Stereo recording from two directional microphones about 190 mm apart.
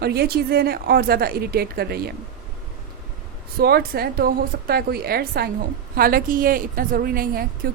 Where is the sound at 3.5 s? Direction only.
55° right (ahead or behind).